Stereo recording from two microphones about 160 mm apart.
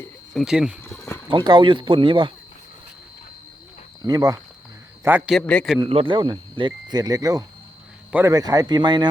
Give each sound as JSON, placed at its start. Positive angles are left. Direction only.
{"t": 0.3, "sound": "a man's voice", "side_deg": -5}
{"t": 0.9, "sound": "wild animals", "side_deg": 15}
{"t": 1.3, "sound": "speech", "side_deg": -30}
{"t": 4.0, "sound": "speech", "side_deg": -25}
{"t": 5.0, "sound": "a man's voice", "side_deg": -10}
{"t": 5.3, "sound": "a man's voice", "side_deg": 5}
{"t": 5.8, "sound": "speech", "side_deg": -35}